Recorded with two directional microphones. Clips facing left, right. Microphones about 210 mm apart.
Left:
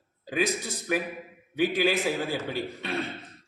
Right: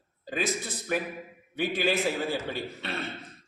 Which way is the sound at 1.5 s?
15° left (ahead or behind).